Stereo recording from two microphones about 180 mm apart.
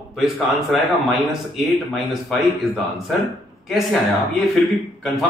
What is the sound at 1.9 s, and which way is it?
Speech, centre (ahead or behind).